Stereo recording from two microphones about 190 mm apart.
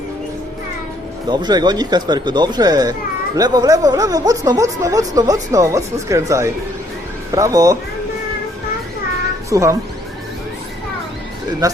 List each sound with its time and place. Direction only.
1.3 s speech: 20° right (ahead or behind)
9.5 s speech: 15° right (ahead or behind)
11.6 s speech: 20° right (ahead or behind)